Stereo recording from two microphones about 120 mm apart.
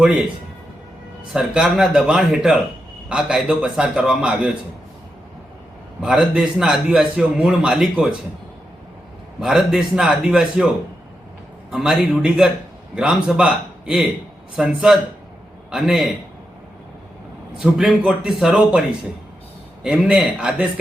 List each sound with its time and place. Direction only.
1.3 s a man's voice: centre (ahead or behind)
6.0 s a man's voice: 5° right (ahead or behind)
9.4 s a man's voice: 5° right (ahead or behind)
11.7 s a man's voice: 5° right (ahead or behind)
17.6 s a man's voice: 5° right (ahead or behind)
19.8 s a man's voice: 5° right (ahead or behind)